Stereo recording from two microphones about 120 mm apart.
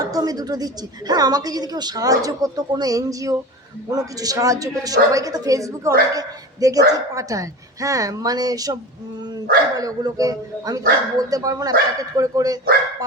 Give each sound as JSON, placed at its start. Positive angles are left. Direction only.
{"t": 0.0, "sound": "a woman's voice", "side_deg": -30}